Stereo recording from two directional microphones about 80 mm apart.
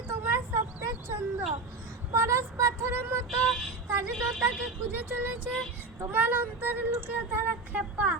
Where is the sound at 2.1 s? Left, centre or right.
Right.